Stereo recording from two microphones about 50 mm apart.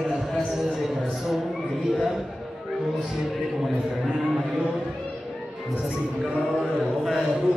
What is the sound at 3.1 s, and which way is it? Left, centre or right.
Speech, centre.